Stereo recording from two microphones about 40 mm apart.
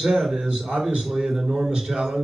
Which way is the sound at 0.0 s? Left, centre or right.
Centre.